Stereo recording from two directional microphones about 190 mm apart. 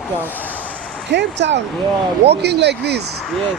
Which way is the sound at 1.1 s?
65° right (ahead or behind).